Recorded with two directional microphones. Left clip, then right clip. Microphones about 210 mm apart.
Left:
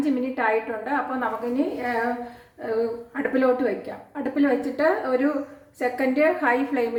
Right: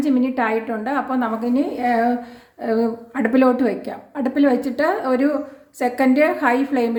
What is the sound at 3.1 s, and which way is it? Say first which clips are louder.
A woman's voice: right 5 dB; 40° right (ahead or behind).